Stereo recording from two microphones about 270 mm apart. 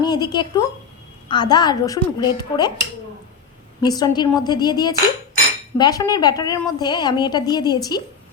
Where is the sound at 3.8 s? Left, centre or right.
Centre.